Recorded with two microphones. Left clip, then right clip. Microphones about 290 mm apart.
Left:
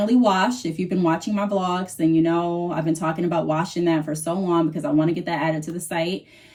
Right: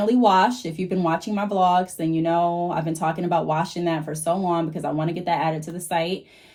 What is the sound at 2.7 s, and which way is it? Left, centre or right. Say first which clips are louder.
Speech: even; centre.